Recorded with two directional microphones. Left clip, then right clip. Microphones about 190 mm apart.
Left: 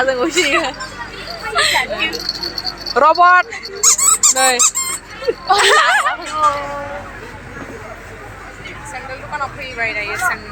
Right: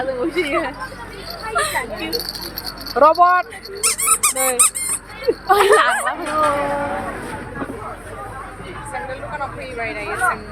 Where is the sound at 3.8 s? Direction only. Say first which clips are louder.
Left 7 dB; 35° left (ahead or behind).